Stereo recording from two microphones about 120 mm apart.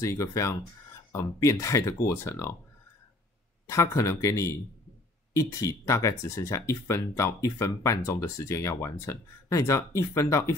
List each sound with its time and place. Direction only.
0.0 s speech: 25° left (ahead or behind)
3.6 s speech: 25° left (ahead or behind)